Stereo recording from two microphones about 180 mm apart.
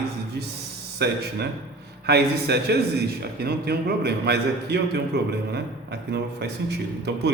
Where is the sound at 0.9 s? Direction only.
65° right (ahead or behind).